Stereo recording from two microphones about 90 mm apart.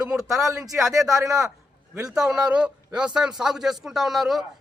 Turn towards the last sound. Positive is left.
turn(degrees=-5)  # may be behind; listen again after turning